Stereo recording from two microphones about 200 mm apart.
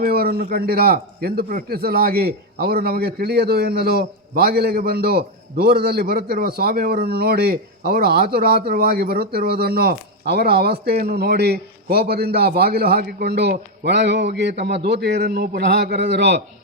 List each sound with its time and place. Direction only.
0.0 s a man's voice: 50° right (ahead or behind)